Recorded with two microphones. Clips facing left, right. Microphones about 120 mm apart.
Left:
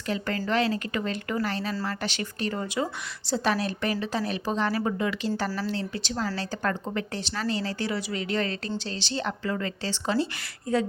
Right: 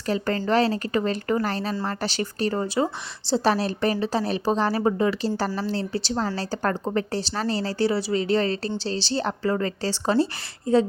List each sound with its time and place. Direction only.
0.0 s a woman's voice: 35° right (ahead or behind)